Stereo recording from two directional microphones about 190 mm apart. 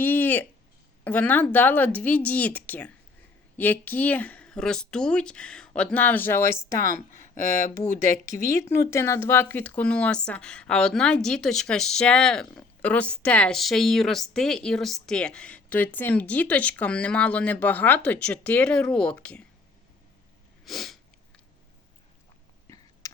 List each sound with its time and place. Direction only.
0.0 s a sound: 10° left (ahead or behind)
1.0 s speech: 10° left (ahead or behind)
8.4 s speech: 15° left (ahead or behind)
20.7 s sneeze: centre (ahead or behind)